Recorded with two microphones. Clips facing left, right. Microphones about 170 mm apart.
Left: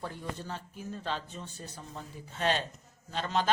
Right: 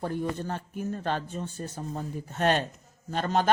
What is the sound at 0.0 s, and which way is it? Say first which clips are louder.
Speech: right 9 dB; 50° right (ahead or behind).